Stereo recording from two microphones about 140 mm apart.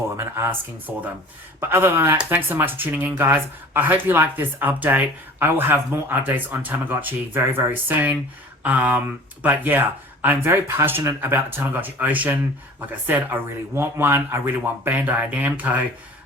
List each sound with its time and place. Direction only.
0.2 s speech: 20° right (ahead or behind)